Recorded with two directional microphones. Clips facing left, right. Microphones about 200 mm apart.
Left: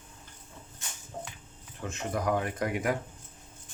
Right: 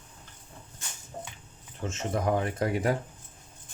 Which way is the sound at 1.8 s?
25° right (ahead or behind).